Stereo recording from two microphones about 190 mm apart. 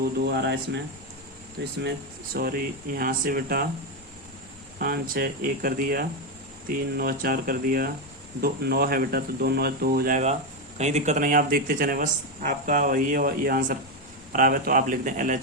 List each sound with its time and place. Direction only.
0.3 s speech: 65° right (ahead or behind)
2.3 s speech: 50° right (ahead or behind)
4.8 s speech: 50° right (ahead or behind)